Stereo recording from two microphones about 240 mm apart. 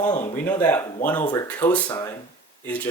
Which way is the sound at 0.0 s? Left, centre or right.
Centre.